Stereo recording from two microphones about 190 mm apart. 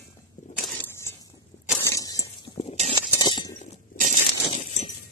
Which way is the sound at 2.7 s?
35° right (ahead or behind).